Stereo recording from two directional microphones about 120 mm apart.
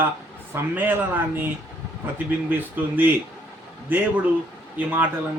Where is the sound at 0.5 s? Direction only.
20° right (ahead or behind).